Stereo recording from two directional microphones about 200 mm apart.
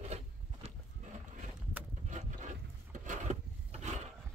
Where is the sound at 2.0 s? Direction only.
35° right (ahead or behind).